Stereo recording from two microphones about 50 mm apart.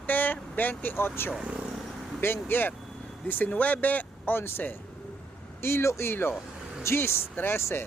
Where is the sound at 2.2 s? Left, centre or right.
Left.